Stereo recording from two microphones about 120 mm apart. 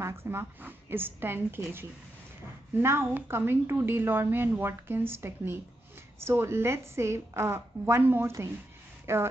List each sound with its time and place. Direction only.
0.0 s speech: 20° right (ahead or behind)